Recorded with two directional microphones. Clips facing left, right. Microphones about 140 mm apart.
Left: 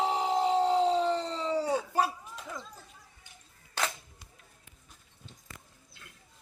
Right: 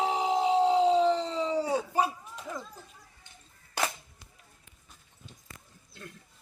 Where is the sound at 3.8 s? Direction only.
10° right (ahead or behind).